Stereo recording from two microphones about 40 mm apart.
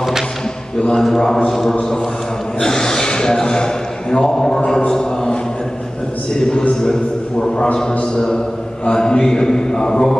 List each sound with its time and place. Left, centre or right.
0.7 s a sound: centre
1.1 s a man's voice: centre
8.0 s a man's voice: centre